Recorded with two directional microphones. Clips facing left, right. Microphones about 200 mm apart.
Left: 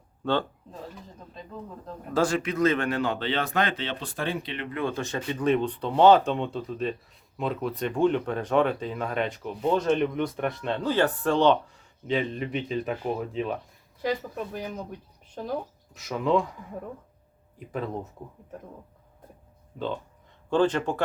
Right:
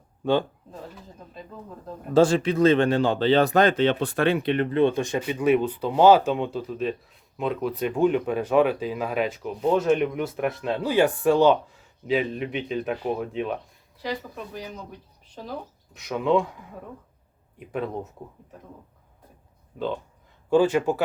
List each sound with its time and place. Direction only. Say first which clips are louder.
2.1 s speech: right 6 dB; 30° right (ahead or behind); by 4.5 s 65° right (ahead or behind)
4.7 s speech: right 5 dB; 25° right (ahead or behind); by 13.6 s 5° right (ahead or behind)
14.0 s speech: left 3 dB; 50° left (ahead or behind)
16.0 s speech: right 2 dB; centre (ahead or behind)
17.6 s speech: right 2 dB; centre (ahead or behind)
20.5 s speech: right 4 dB; 10° right (ahead or behind)